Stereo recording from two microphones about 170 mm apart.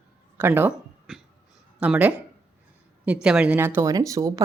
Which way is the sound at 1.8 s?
10° right (ahead or behind).